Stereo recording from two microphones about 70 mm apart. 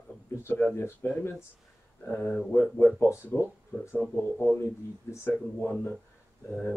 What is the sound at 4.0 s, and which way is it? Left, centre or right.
Speech, centre.